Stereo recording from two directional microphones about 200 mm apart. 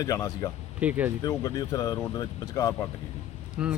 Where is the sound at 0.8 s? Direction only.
5° right (ahead or behind).